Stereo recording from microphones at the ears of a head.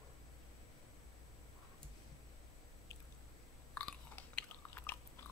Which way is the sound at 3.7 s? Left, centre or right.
Left.